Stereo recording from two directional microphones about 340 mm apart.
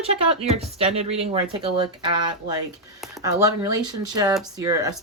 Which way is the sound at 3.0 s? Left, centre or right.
Centre.